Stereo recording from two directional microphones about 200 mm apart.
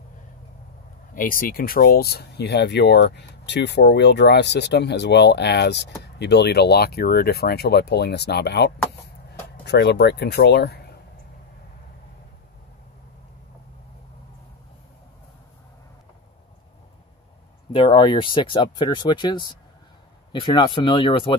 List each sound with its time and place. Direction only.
1.1 s speech: 45° left (ahead or behind)
17.7 s speech: 25° left (ahead or behind)